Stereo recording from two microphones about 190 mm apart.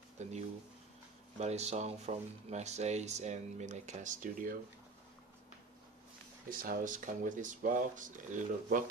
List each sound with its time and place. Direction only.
0.2 s speech: 35° right (ahead or behind)
6.5 s speech: 50° right (ahead or behind)